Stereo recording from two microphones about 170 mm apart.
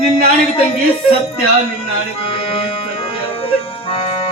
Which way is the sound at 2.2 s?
30° left (ahead or behind).